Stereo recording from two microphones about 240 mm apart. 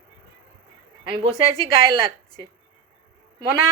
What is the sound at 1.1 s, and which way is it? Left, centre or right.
Speech, right.